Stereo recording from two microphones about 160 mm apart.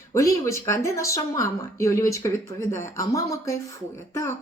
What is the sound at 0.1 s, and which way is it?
A man's voice, 20° left (ahead or behind).